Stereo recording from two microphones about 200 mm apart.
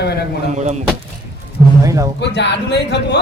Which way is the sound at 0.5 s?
35° right (ahead or behind).